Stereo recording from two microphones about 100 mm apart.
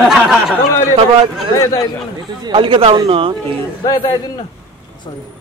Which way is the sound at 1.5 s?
30° left (ahead or behind).